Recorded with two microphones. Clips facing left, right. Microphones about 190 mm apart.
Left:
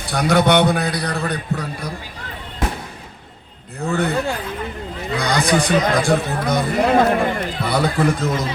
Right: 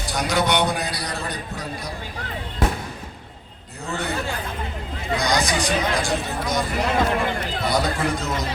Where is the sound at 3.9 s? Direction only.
60° left (ahead or behind).